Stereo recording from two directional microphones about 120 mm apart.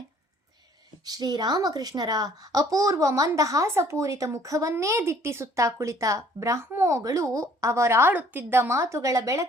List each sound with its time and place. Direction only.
1.0 s a woman's voice: 35° right (ahead or behind)